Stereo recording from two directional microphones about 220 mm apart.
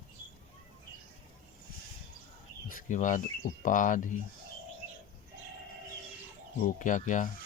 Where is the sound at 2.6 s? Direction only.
35° left (ahead or behind).